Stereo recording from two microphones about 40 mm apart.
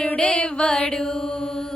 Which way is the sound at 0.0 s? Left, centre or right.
Left.